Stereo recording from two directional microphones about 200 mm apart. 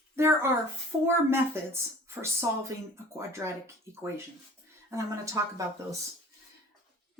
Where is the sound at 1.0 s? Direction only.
10° right (ahead or behind).